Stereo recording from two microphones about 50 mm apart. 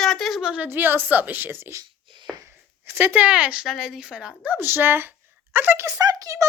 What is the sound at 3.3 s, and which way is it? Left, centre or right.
Speech, right.